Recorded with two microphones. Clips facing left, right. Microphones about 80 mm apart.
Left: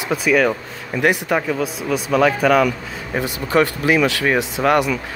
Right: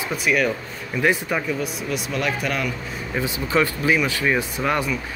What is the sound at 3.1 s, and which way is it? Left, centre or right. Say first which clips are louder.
Speech: left 4 dB; left.